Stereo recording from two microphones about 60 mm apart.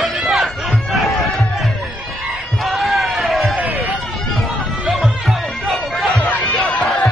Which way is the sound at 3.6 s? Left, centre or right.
Right.